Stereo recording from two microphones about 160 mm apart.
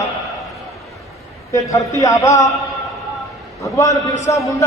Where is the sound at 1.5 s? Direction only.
20° left (ahead or behind).